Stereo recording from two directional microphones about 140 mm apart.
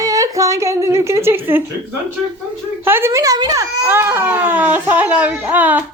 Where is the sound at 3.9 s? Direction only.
15° right (ahead or behind).